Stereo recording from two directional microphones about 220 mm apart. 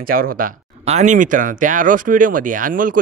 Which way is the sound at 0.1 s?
40° right (ahead or behind).